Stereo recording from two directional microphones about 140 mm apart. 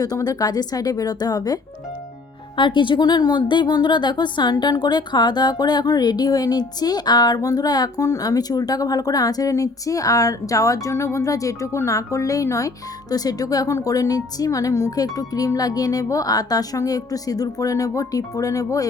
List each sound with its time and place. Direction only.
0.0 s a woman's voice: 25° left (ahead or behind)
2.6 s a woman's voice: 35° left (ahead or behind)